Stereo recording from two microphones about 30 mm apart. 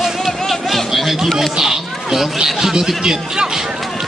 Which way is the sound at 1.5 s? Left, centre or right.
Centre.